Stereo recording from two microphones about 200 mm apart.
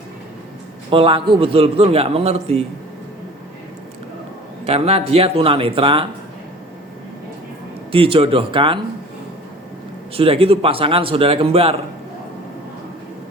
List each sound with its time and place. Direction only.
0.9 s a man's voice: 25° right (ahead or behind)
4.6 s a man's voice: 30° right (ahead or behind)
7.9 s a man's voice: 25° right (ahead or behind)
10.2 s a man's voice: 30° right (ahead or behind)